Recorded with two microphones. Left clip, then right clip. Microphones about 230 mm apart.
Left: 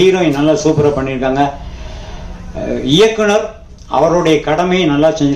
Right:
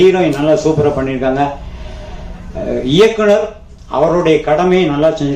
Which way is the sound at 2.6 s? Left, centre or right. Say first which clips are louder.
Even; left.